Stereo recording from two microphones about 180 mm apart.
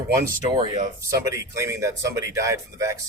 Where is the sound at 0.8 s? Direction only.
15° right (ahead or behind).